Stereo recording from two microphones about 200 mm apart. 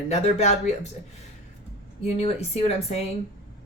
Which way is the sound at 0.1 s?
30° left (ahead or behind).